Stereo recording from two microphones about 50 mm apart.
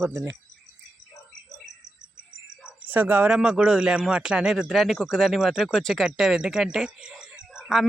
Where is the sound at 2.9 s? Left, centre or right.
Right.